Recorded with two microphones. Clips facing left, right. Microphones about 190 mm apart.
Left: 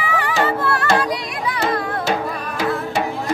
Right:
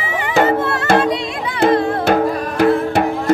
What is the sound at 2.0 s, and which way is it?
Music, 60° right (ahead or behind).